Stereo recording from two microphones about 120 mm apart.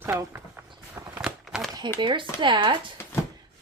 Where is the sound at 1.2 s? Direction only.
5° right (ahead or behind).